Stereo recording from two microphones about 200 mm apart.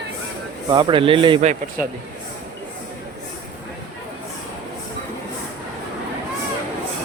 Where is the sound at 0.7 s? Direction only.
20° right (ahead or behind).